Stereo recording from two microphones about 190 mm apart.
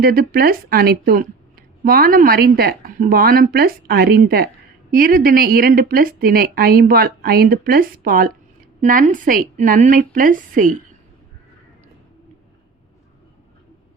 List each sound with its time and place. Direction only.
0.0 s a woman's voice: 50° right (ahead or behind)